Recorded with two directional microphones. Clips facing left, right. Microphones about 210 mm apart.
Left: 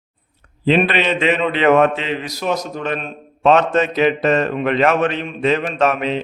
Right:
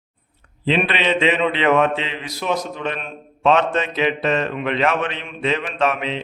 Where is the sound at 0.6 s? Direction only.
45° left (ahead or behind).